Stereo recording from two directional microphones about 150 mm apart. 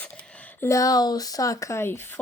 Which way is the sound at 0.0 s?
10° left (ahead or behind).